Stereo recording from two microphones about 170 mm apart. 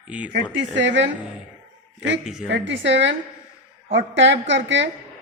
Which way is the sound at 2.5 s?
90° right.